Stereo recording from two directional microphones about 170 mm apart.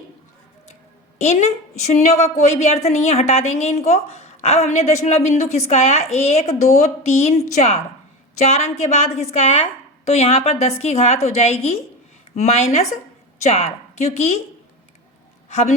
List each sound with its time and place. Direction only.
1.2 s a woman's voice: 40° left (ahead or behind)
15.4 s a man's voice: 40° left (ahead or behind)